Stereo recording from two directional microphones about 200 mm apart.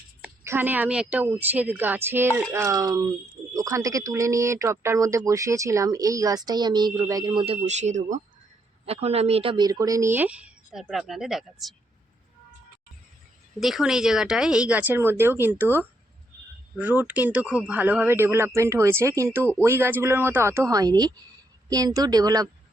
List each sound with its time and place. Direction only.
0.2 s speech: 10° right (ahead or behind)
13.6 s speech: centre (ahead or behind); by 22.4 s 20° right (ahead or behind)